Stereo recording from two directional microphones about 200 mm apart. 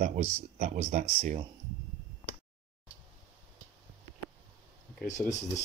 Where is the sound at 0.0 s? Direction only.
40° right (ahead or behind).